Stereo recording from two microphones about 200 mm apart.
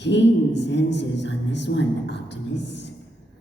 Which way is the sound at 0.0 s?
60° left (ahead or behind).